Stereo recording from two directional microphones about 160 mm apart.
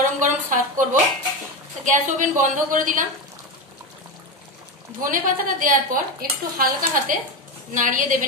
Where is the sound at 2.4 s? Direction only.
50° right (ahead or behind).